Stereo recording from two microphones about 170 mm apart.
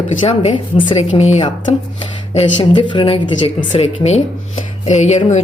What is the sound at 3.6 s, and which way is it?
Speech, 45° left (ahead or behind).